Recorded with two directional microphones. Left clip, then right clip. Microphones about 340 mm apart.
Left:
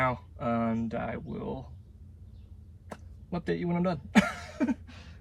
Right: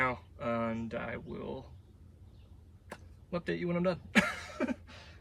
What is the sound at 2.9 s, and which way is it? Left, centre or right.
Speech, centre.